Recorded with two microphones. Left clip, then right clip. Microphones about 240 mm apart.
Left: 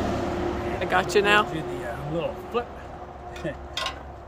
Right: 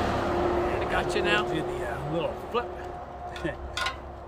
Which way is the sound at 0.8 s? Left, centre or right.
Left.